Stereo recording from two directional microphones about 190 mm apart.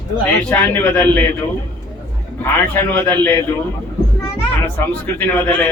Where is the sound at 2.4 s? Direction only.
10° left (ahead or behind).